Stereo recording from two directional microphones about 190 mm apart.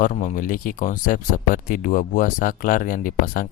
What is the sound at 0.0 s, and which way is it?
Speech, 40° left (ahead or behind).